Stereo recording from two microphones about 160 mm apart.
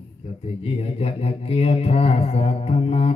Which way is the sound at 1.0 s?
40° left (ahead or behind).